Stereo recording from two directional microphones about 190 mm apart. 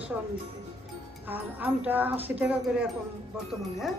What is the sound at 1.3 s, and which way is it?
A woman's voice, 10° right (ahead or behind).